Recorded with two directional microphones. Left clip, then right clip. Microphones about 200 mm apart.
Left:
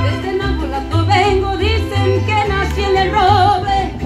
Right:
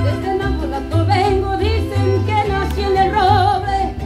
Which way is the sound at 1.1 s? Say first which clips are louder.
Left 3 dB; 30° left (ahead or behind).